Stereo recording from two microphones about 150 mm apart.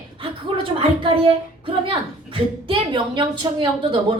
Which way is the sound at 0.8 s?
35° right (ahead or behind).